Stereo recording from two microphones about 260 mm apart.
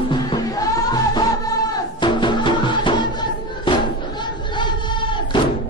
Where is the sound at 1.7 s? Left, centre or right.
Centre.